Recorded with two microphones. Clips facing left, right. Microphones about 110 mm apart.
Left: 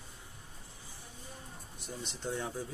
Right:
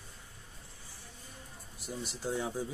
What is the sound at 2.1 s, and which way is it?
Speech, 10° right (ahead or behind).